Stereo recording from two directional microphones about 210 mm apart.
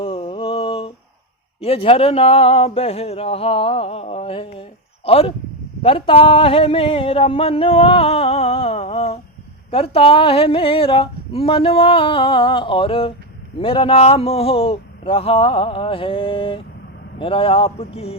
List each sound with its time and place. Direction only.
0.0 s mantra: 25° left (ahead or behind)
1.6 s speech: 25° left (ahead or behind)